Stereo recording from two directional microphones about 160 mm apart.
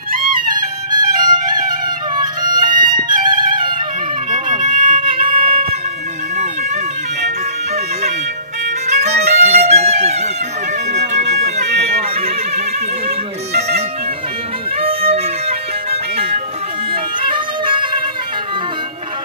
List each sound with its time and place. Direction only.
0.9 s music: 25° right (ahead or behind)
4.3 s music: 55° right (ahead or behind)
7.2 s music: 45° right (ahead or behind)
13.5 s bagpipes: 40° right (ahead or behind)
14.8 s music: 40° right (ahead or behind)